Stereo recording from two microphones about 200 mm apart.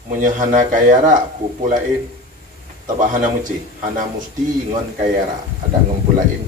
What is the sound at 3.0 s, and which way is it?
Speech, 40° right (ahead or behind).